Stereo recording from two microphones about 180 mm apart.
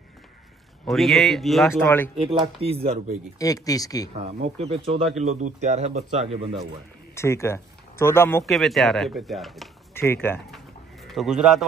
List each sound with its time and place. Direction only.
0.8 s speech: centre (ahead or behind)
2.3 s speech: 30° right (ahead or behind)
3.3 s speech: 20° left (ahead or behind)
4.2 s speech: 35° right (ahead or behind)
7.2 s speech: 15° left (ahead or behind)
8.5 s speech: centre (ahead or behind)
9.9 s speech: 15° left (ahead or behind)
10.5 s bird: centre (ahead or behind)